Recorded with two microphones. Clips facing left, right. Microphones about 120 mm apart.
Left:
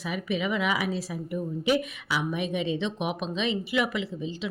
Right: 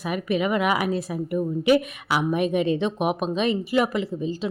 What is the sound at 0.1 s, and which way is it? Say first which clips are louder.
A woman's voice: right 5 dB; 55° right (ahead or behind).